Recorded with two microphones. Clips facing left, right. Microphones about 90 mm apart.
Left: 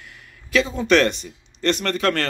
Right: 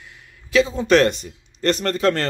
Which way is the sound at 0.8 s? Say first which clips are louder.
Left 1 dB; 35° right (ahead or behind).